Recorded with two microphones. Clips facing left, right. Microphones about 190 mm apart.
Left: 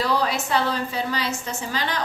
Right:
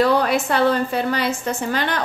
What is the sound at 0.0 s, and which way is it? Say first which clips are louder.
A woman's voice: right 6 dB; 55° right (ahead or behind).